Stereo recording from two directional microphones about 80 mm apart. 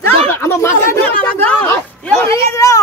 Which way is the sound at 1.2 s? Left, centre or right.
Centre.